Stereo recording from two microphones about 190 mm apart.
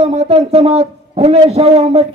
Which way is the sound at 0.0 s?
35° right (ahead or behind).